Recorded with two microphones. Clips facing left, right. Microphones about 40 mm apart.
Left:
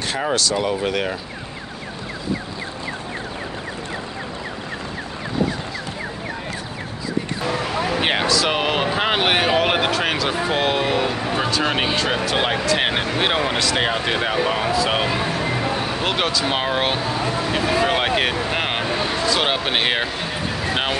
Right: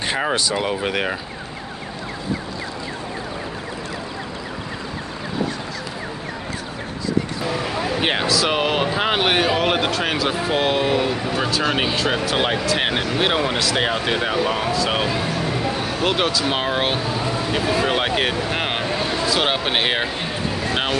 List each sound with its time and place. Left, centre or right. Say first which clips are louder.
0.1 s speech: even; right
8.0 s speech: even; centre
18.5 s a sound: left 1 dB; centre
19.2 s speech: even; centre
20.6 s vehicle: left 1 dB; centre